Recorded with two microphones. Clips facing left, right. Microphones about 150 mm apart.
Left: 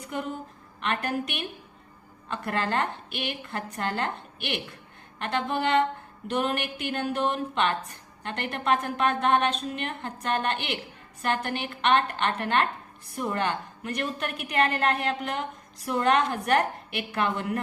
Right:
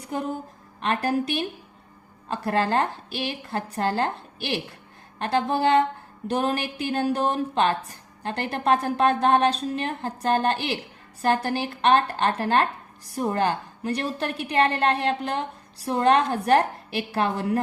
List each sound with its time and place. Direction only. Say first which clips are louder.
0.1 s a woman's voice: right 4 dB; 35° right (ahead or behind)